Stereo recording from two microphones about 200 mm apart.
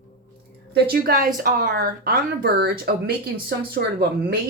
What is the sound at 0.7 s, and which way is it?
Speech, 50° right (ahead or behind).